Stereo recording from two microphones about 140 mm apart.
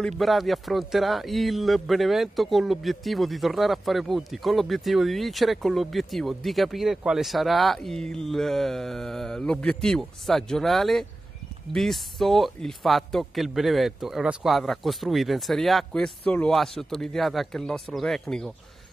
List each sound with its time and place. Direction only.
0.0 s speech: centre (ahead or behind)